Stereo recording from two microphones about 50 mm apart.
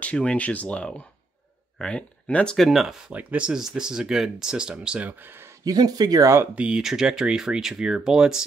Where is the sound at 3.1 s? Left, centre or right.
Right.